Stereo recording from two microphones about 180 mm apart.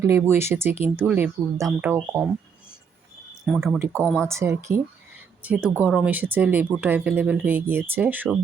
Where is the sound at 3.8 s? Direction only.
15° right (ahead or behind).